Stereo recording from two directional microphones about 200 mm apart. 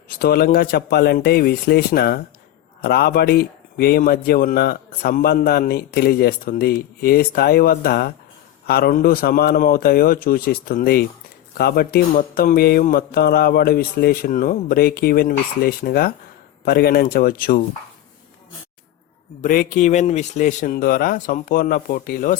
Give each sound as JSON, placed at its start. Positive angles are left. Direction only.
{"t": 0.2, "sound": "a man's voice", "side_deg": 50}
{"t": 19.4, "sound": "a man's voice", "side_deg": 45}